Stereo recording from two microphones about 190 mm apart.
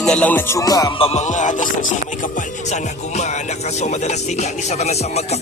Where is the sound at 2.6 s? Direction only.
40° left (ahead or behind).